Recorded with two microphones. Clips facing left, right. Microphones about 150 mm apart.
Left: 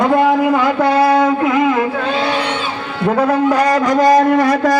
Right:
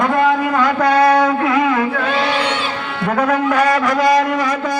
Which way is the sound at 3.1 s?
30° left (ahead or behind).